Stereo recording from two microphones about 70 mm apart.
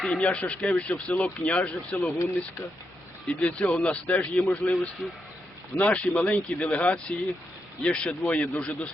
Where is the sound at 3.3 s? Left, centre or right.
Centre.